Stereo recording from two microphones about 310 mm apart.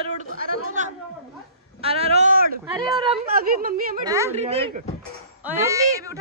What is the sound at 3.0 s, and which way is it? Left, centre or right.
Speech, right.